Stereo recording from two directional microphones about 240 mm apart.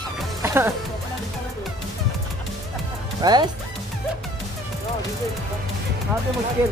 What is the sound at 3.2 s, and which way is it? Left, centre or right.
Speech, centre.